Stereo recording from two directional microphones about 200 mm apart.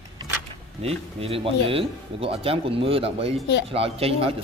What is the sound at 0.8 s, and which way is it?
Speech, 30° right (ahead or behind).